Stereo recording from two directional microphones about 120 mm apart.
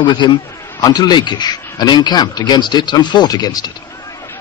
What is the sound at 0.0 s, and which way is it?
A man's voice, 40° left (ahead or behind).